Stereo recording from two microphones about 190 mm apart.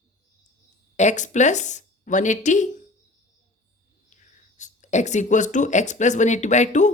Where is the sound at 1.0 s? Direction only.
40° left (ahead or behind).